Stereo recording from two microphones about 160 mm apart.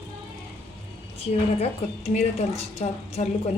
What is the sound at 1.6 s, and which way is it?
A woman's voice, 40° left (ahead or behind).